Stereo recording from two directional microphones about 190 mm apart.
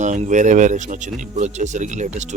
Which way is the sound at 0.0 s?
40° right (ahead or behind).